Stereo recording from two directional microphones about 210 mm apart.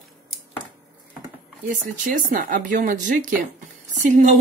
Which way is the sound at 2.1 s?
40° right (ahead or behind).